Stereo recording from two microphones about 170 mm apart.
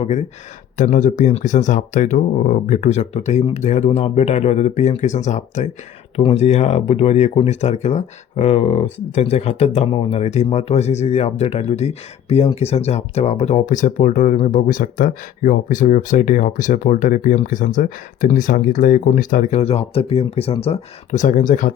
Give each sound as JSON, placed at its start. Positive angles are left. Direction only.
{"t": 0.8, "sound": "speech", "side_deg": 50}